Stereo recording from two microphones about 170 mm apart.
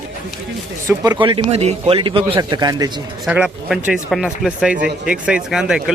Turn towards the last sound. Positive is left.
turn(degrees=-5)  # may be behind; listen again after turning